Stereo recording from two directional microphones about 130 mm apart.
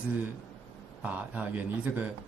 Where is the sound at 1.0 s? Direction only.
10° right (ahead or behind).